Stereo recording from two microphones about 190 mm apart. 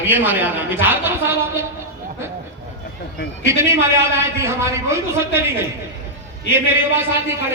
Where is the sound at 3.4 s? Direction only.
15° right (ahead or behind).